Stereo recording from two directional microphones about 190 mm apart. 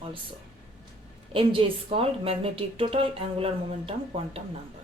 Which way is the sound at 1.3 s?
30° right (ahead or behind).